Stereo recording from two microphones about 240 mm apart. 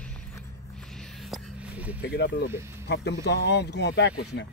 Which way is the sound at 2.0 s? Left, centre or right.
Left.